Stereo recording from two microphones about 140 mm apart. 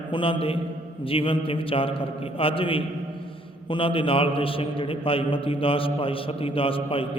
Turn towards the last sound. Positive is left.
turn(degrees=40)  # may be behind; listen again after turning